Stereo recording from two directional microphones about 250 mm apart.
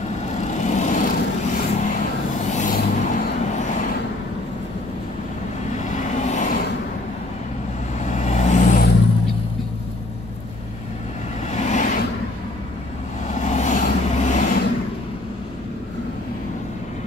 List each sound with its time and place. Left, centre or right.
0.4 s vehicle: left
5.8 s vehicle: left
8.0 s vehicle: left
11.5 s a sound: left
13.3 s vehicle: left